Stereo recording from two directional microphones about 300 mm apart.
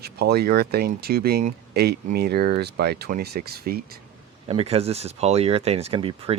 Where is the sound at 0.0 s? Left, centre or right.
Right.